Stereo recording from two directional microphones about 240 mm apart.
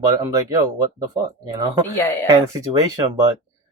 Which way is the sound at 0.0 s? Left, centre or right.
Centre.